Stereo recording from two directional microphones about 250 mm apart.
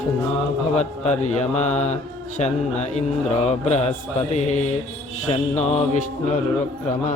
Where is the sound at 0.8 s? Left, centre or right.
Left.